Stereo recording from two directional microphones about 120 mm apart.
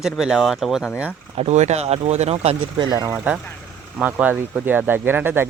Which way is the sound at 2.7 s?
40° right (ahead or behind).